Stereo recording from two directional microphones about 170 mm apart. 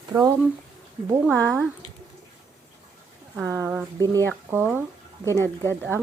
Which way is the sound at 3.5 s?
15° right (ahead or behind).